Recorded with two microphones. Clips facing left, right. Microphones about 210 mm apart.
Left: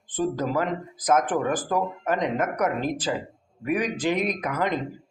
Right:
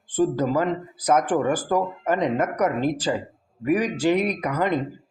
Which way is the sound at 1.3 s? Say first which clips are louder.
Right 3 dB; 10° right (ahead or behind).